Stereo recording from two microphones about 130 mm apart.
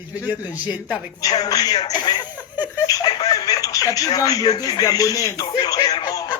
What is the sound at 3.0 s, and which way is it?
Telephone, 30° left (ahead or behind).